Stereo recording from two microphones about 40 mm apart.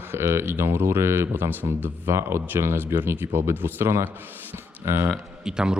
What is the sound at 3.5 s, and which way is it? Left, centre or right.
Speech, right.